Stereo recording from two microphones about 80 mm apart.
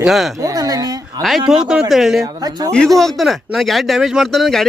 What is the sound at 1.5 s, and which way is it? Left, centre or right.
Speech, centre.